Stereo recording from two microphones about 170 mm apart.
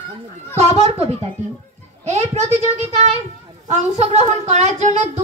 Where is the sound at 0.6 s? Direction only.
35° right (ahead or behind).